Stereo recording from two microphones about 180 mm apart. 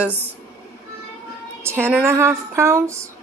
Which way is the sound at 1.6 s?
15° right (ahead or behind).